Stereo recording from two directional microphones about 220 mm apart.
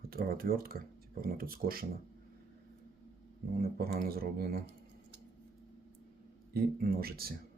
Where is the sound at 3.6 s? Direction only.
45° right (ahead or behind).